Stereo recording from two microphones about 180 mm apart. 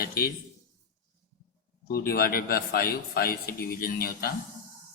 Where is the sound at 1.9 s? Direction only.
60° left (ahead or behind).